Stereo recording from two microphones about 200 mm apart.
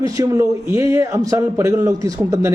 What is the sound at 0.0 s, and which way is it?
A man's voice, 15° right (ahead or behind).